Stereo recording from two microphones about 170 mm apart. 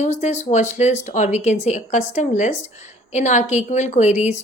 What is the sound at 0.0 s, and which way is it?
Speech, 45° left (ahead or behind).